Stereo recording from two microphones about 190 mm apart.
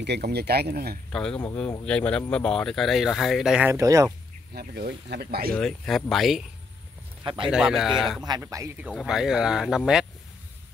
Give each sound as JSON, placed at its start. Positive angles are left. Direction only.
{"t": 0.0, "sound": "speech", "side_deg": -60}
{"t": 1.4, "sound": "speech", "side_deg": 5}
{"t": 3.7, "sound": "speech", "side_deg": -15}
{"t": 4.6, "sound": "speech", "side_deg": -55}
{"t": 5.5, "sound": "speech", "side_deg": 5}
{"t": 7.4, "sound": "speech", "side_deg": -5}
{"t": 8.2, "sound": "speech", "side_deg": -20}
{"t": 8.8, "sound": "speech", "side_deg": -5}